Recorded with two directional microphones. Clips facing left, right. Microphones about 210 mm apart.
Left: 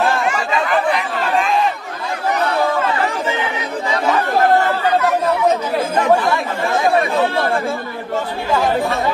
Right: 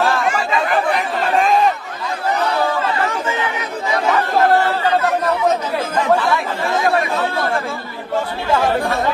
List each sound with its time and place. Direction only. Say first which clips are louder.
1.3 s chatter: right 2 dB; 40° right (ahead or behind)